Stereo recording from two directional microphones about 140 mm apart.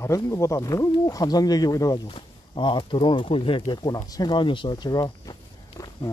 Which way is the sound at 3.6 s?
30° left (ahead or behind).